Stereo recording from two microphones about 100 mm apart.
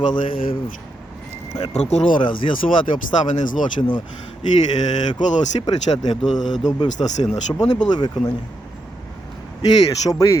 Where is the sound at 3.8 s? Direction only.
40° left (ahead or behind).